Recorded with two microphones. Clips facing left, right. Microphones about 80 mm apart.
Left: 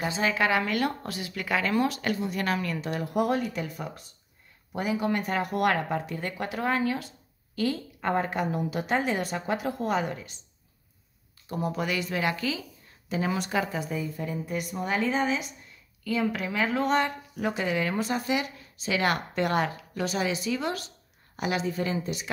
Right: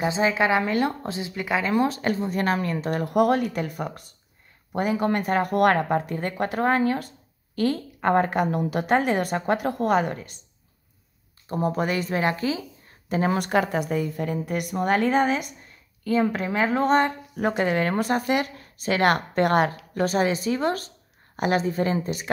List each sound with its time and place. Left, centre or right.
0.0 s speech: right
11.4 s a woman's voice: right
16.0 s speech: right